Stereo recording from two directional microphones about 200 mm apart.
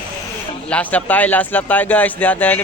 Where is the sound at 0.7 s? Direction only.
5° left (ahead or behind).